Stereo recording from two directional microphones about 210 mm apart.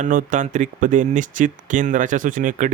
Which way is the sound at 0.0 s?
35° right (ahead or behind).